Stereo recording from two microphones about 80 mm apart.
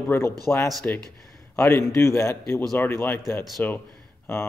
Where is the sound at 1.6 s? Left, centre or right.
Left.